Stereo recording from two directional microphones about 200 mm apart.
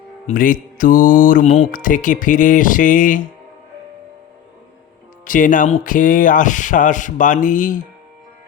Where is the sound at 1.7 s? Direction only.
40° left (ahead or behind).